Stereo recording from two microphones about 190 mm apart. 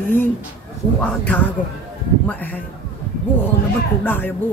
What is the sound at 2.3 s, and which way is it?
Speech, 10° left (ahead or behind).